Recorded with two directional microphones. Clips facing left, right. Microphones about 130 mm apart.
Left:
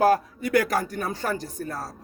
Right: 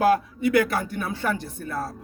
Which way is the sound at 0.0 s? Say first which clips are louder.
Right 1 dB; 40° left (ahead or behind).